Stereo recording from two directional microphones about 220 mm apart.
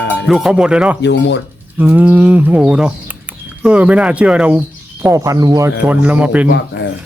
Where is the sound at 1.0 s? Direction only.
50° left (ahead or behind).